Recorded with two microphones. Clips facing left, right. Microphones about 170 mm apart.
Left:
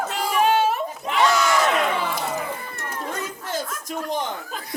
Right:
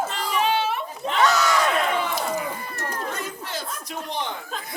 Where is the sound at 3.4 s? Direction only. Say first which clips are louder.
Left 4 dB; 45° left (ahead or behind).